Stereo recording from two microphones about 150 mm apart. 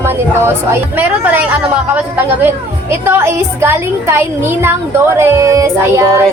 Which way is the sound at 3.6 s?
15° right (ahead or behind).